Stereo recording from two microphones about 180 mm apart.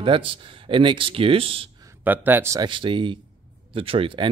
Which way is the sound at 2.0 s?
10° right (ahead or behind).